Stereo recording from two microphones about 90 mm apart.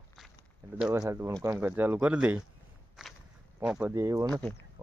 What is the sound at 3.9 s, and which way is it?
Speech, 35° right (ahead or behind).